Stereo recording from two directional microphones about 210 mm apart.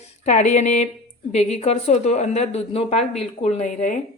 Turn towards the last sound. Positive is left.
turn(degrees=35)  # may be behind; listen again after turning